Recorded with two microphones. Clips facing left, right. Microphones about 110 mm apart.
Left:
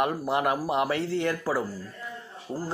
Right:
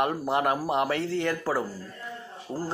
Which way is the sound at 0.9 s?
45° right (ahead or behind).